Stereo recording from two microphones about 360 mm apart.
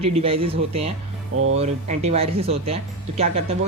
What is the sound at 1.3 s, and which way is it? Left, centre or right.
Speech, right.